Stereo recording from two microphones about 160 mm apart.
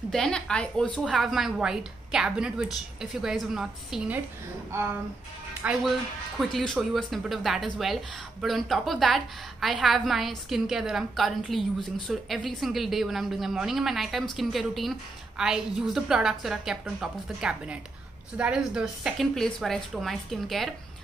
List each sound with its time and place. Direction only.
0.1 s a woman's voice: 5° left (ahead or behind)
5.6 s speech: 10° right (ahead or behind)
6.5 s a woman's voice: centre (ahead or behind)